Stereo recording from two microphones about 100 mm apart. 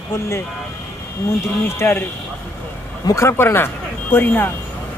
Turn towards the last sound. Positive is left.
turn(degrees=20)  # may be behind; listen again after turning